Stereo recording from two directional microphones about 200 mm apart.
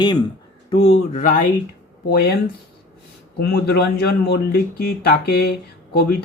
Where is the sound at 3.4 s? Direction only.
55° left (ahead or behind).